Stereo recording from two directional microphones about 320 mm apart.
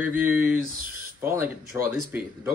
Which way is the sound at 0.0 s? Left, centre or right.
Centre.